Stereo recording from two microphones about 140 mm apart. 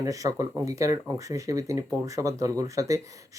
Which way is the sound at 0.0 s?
25° right (ahead or behind).